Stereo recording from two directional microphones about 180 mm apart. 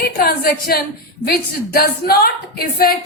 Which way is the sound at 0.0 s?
55° left (ahead or behind).